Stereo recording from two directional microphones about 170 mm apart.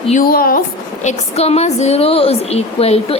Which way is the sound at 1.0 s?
40° left (ahead or behind).